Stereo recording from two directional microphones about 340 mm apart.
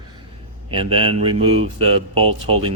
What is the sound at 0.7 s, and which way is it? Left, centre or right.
Speech, centre.